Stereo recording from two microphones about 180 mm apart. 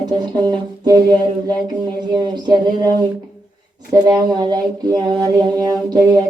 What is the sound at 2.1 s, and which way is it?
Mantra, 25° right (ahead or behind).